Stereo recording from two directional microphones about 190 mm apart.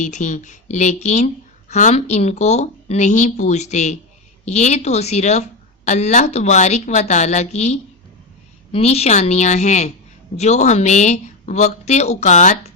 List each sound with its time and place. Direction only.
0.0 s speech: 40° left (ahead or behind)